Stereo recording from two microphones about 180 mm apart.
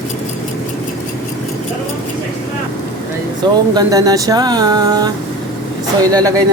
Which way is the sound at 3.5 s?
20° right (ahead or behind).